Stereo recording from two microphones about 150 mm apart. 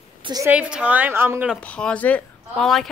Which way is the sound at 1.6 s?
10° left (ahead or behind).